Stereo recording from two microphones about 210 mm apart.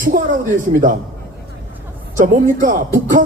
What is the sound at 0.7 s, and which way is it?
Speech, 40° right (ahead or behind).